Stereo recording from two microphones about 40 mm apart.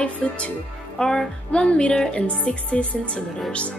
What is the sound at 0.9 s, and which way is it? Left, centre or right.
A woman's voice, centre.